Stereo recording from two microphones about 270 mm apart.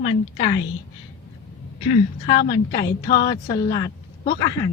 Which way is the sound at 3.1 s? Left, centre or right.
Centre.